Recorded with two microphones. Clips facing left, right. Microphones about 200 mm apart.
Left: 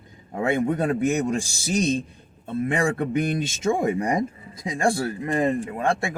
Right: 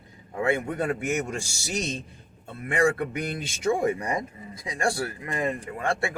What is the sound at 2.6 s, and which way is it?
Speech, 25° left (ahead or behind).